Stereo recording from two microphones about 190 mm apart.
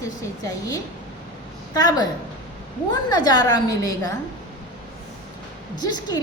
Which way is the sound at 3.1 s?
20° left (ahead or behind).